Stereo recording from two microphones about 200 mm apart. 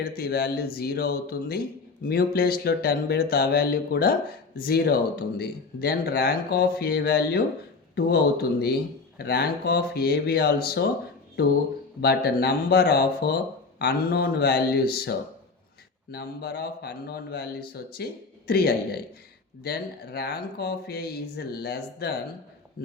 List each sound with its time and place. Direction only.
0.2 s speech: 50° left (ahead or behind)
11.9 s speech: 55° left (ahead or behind)
16.1 s speech: 55° left (ahead or behind)